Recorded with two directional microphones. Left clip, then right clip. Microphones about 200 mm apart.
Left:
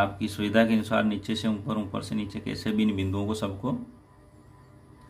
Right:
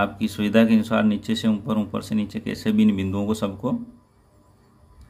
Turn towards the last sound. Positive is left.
turn(degrees=-25)  # may be behind; listen again after turning